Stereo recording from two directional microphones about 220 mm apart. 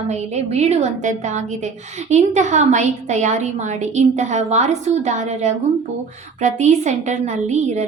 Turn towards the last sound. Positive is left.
turn(degrees=-30)  # may be behind; listen again after turning